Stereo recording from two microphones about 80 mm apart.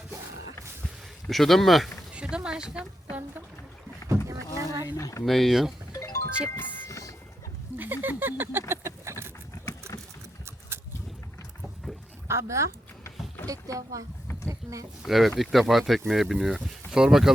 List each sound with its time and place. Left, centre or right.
1.3 s speech: centre
2.1 s a sound: centre
4.5 s speech: right
4.9 s speech: left
5.2 s speech: centre
5.9 s music: left
7.8 s a sound: right
12.3 s speech: right
15.0 s speech: centre